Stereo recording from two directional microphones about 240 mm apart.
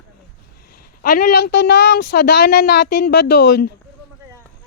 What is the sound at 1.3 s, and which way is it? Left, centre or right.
Music, left.